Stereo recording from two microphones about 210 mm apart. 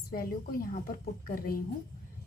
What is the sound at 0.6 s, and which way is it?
Speech, 45° left (ahead or behind).